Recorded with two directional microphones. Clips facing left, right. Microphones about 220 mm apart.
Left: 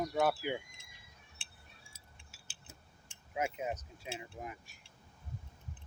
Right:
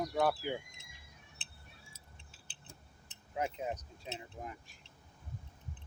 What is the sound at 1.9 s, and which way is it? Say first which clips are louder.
Keys jangling: right 2 dB; 10° left (ahead or behind).